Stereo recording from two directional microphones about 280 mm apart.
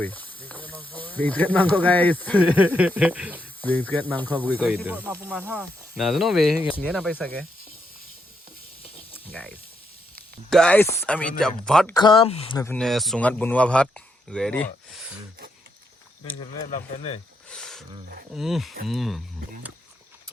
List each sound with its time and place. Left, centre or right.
0.0 s speech: centre
2.4 s speech: centre
3.6 s speech: centre
4.5 s speech: centre
9.1 s snake: centre
10.2 s speech: centre
11.9 s speech: centre
16.4 s speech: left
17.5 s a sound: centre
18.3 s speech: centre